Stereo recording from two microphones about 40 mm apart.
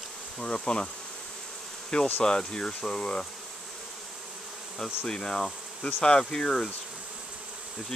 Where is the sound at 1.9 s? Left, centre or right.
Left.